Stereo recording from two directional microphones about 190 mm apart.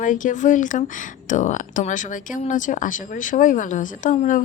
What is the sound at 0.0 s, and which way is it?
Speech, 45° left (ahead or behind).